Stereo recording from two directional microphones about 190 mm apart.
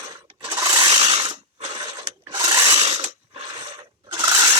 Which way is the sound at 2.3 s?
20° right (ahead or behind).